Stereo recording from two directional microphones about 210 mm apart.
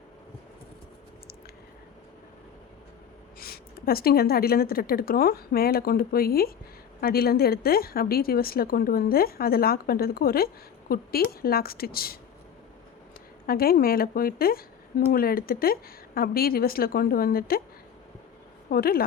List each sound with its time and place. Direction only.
3.4 s a woman's voice: 45° left (ahead or behind)
13.5 s a woman's voice: 45° left (ahead or behind)
18.7 s a woman's voice: 45° left (ahead or behind)